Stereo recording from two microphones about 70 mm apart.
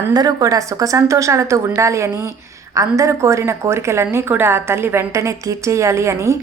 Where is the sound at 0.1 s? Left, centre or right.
Right.